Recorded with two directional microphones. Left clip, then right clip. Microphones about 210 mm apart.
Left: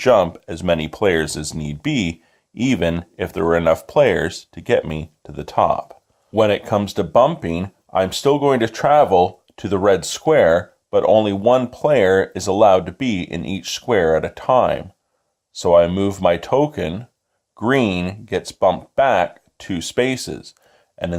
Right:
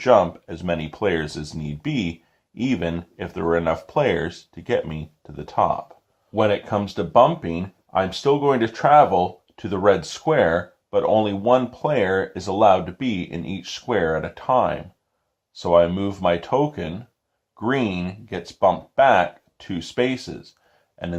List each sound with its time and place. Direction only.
0.0 s speech: 45° left (ahead or behind)